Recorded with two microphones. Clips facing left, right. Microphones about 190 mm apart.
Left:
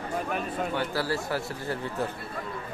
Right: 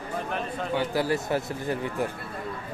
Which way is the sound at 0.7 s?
15° right (ahead or behind).